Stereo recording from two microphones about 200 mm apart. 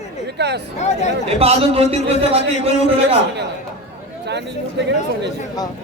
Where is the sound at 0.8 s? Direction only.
35° left (ahead or behind).